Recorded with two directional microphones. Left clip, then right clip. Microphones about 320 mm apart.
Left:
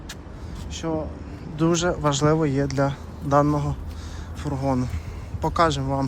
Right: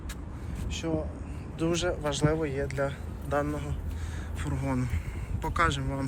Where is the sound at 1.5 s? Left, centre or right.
Left.